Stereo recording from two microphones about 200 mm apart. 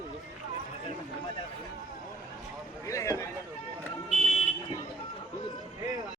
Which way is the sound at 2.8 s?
15° left (ahead or behind).